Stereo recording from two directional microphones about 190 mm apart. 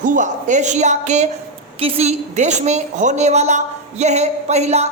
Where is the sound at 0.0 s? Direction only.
40° right (ahead or behind).